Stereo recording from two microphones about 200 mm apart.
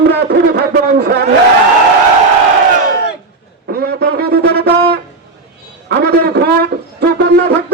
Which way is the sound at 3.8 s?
55° right (ahead or behind).